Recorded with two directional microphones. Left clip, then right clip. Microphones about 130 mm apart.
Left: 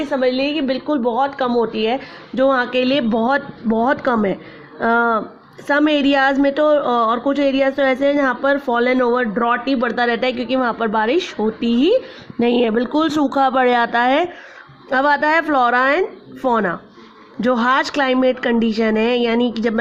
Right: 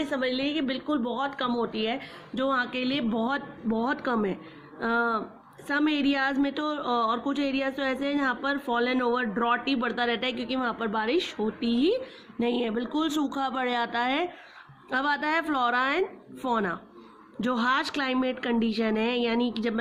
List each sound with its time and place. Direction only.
0.0 s a woman's voice: 40° left (ahead or behind)